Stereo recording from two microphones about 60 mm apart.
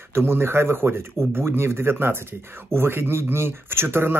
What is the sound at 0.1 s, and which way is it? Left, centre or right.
Speech, right.